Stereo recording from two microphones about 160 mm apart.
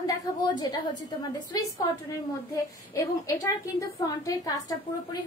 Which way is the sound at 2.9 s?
20° left (ahead or behind).